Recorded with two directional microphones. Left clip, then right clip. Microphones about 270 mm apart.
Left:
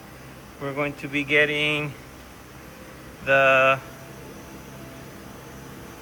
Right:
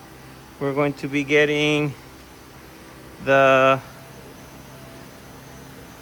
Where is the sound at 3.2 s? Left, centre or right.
Right.